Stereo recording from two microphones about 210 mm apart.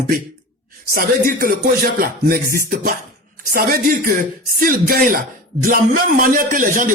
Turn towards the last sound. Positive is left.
turn(degrees=-40)  # may be behind; listen again after turning